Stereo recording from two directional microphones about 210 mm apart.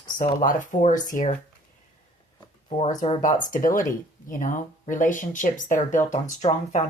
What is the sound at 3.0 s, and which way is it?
Speech, 40° left (ahead or behind).